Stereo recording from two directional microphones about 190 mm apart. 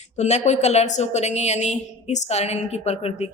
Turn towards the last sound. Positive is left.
turn(degrees=35)  # may be behind; listen again after turning